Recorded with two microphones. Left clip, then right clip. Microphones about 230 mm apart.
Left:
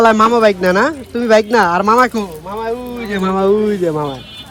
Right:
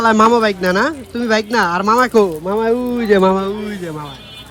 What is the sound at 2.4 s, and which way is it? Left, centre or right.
Speech, right.